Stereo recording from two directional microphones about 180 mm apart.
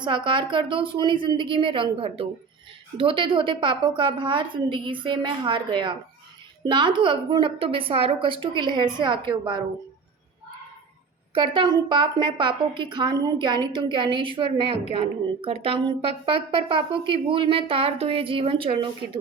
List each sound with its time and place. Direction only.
0.0 s a woman's voice: 25° right (ahead or behind)
11.3 s a woman's voice: 30° right (ahead or behind)